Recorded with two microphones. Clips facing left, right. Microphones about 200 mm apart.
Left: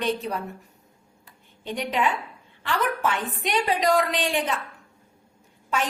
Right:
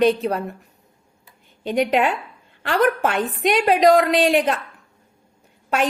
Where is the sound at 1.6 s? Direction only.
85° right; by 4.5 s 65° right (ahead or behind).